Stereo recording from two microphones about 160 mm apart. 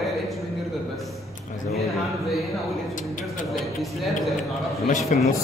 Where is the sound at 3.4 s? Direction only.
Centre (ahead or behind).